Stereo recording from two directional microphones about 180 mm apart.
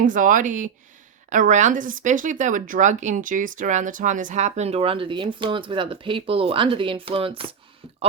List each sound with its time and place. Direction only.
0.0 s speech: 45° right (ahead or behind); by 7.4 s 30° right (ahead or behind)